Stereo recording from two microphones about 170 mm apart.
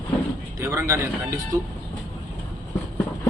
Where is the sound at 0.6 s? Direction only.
15° right (ahead or behind).